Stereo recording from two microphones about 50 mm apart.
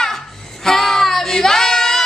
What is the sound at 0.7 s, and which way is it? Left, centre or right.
Female singing, centre.